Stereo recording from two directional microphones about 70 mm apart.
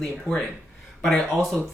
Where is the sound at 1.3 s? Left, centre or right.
Centre.